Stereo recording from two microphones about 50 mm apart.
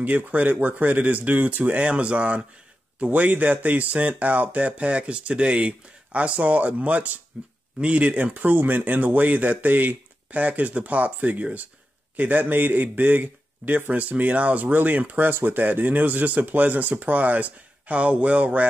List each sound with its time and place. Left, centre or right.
0.0 s speech: right